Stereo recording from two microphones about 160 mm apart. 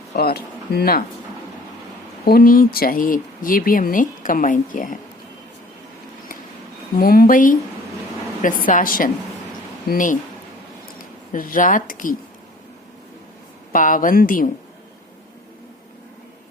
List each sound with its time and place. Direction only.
0.2 s speech: 80° left
2.2 s speech: 65° left (ahead or behind)
6.9 s speech: 65° left (ahead or behind)
8.6 s speech: 60° left (ahead or behind)
13.7 s speech: 55° left (ahead or behind)